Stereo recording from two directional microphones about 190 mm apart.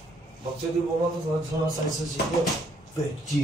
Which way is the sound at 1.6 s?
Centre (ahead or behind).